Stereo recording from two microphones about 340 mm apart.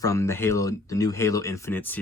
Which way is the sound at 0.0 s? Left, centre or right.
Centre.